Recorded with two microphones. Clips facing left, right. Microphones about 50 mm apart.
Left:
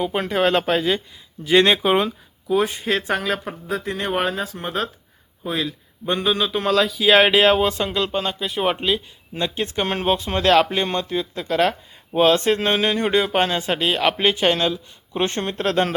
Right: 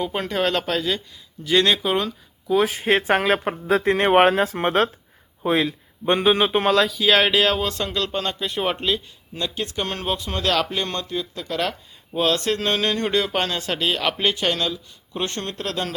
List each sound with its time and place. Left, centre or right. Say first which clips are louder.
0.0 s speech: left 3 dB; centre
2.5 s speech: even; centre
2.8 s speech: right 3 dB; right
3.7 s speech: right 7 dB; right
6.7 s speech: left 4 dB; centre
9.3 s speech: left 3 dB; left